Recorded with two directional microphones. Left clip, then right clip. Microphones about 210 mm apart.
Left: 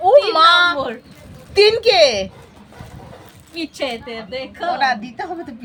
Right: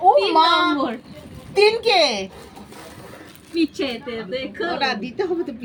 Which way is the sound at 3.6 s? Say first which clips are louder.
Right 1 dB; 55° left (ahead or behind).